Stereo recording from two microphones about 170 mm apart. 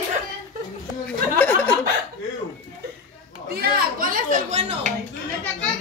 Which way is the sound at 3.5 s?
65° right (ahead or behind).